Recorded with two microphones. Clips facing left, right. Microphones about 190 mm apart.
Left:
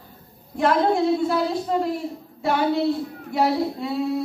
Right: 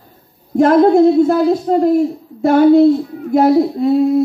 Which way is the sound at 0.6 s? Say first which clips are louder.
Right 11 dB; 45° right (ahead or behind).